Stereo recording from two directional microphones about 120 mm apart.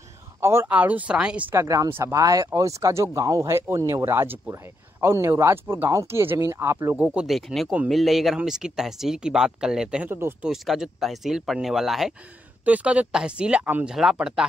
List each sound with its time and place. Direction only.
0.4 s speech: 20° right (ahead or behind)
1.5 s speech: 25° right (ahead or behind)
7.0 s speech: 10° right (ahead or behind)
10.0 s speech: 20° right (ahead or behind)
10.4 s speech: centre (ahead or behind)